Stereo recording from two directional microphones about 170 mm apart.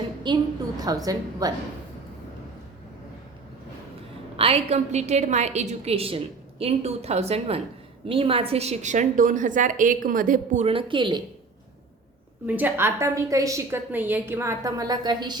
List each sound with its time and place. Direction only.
0.3 s a woman's voice: 25° right (ahead or behind)
4.4 s a woman's voice: 35° right (ahead or behind)
10.7 s a woman's voice: 30° right (ahead or behind)
12.5 s a woman's voice: 10° right (ahead or behind)